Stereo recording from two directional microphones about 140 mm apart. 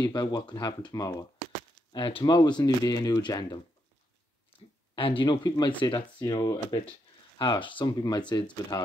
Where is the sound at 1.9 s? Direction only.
40° left (ahead or behind).